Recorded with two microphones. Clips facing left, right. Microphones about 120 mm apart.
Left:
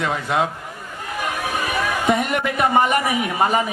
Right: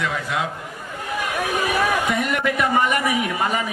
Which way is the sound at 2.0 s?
30° left (ahead or behind).